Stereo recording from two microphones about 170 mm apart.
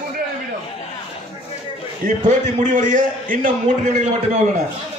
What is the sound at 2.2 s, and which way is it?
A man's voice, 50° right (ahead or behind).